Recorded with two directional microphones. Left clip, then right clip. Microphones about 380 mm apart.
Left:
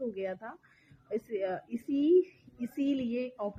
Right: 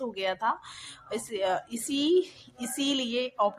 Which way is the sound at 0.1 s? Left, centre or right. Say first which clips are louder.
Right 9 dB; left.